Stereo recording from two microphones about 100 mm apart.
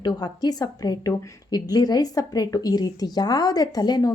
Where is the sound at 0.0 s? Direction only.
40° left (ahead or behind).